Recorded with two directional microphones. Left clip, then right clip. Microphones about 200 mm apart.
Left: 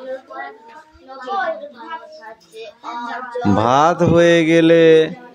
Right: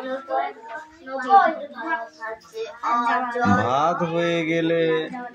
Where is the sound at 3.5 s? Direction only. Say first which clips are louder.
Left 11 dB; 50° left (ahead or behind).